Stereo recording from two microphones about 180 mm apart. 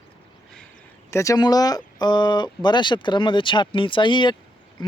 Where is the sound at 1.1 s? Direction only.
15° left (ahead or behind).